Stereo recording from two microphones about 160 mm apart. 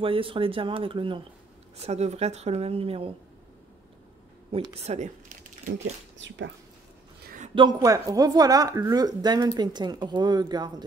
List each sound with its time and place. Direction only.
0.0 s speech: 35° right (ahead or behind)
1.9 s speech: 45° right (ahead or behind)
4.5 s speech: 40° right (ahead or behind)
7.5 s speech: 25° right (ahead or behind)